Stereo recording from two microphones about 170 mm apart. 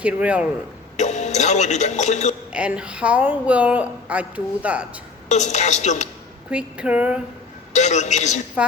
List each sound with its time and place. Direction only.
0.0 s a woman's voice: 5° right (ahead or behind)
0.9 s speech: 45° left (ahead or behind)
2.5 s a woman's voice: 5° right (ahead or behind)
5.3 s speech: 45° left (ahead or behind)
6.5 s a woman's voice: 5° right (ahead or behind)
7.7 s speech: 45° left (ahead or behind)
8.6 s a woman's voice: 5° right (ahead or behind)